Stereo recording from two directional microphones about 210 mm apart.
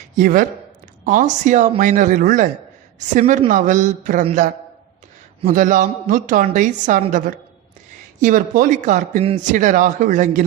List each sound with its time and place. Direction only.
0.2 s a man's voice: 40° right (ahead or behind)